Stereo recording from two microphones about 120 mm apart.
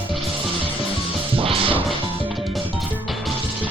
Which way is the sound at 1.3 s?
50° right (ahead or behind).